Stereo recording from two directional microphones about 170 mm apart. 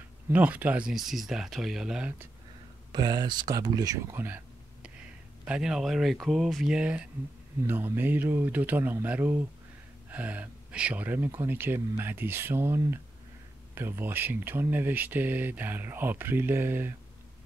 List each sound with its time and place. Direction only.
0.3 s speech: 10° right (ahead or behind)
2.9 s speech: 25° right (ahead or behind)
5.4 s speech: 5° right (ahead or behind)